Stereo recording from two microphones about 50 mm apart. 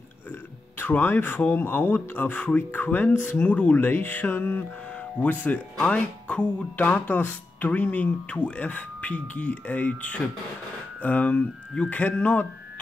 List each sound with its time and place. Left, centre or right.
0.3 s a sound: left
1.5 s speech: left
5.2 s speech: left